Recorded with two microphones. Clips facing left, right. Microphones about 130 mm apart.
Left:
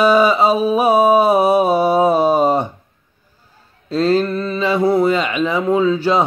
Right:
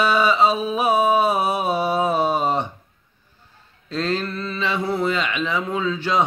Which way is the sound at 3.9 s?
35° left (ahead or behind).